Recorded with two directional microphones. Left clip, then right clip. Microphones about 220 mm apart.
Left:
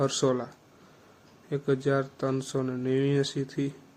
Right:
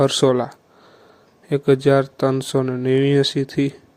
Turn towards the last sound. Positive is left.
turn(degrees=-35)  # may be behind; listen again after turning